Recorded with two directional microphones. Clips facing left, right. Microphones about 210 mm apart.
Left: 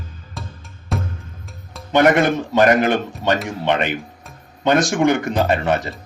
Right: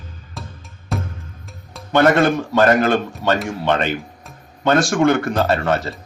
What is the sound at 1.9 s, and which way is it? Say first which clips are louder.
Speech: even; 15° left (ahead or behind).